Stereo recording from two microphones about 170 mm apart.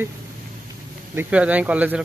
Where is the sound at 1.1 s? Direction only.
10° right (ahead or behind).